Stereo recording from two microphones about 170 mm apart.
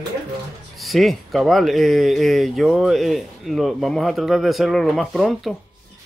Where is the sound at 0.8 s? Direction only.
Centre (ahead or behind).